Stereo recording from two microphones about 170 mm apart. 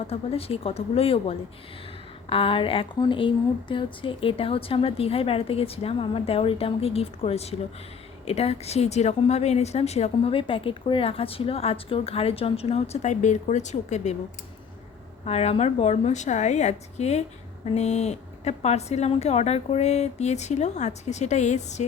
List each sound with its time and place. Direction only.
0.1 s speech: 35° left (ahead or behind)
15.2 s speech: 40° left (ahead or behind)